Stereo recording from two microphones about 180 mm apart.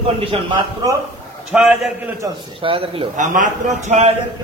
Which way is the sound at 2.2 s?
30° right (ahead or behind).